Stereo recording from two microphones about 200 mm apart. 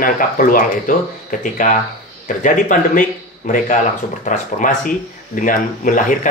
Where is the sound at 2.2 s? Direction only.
40° left (ahead or behind).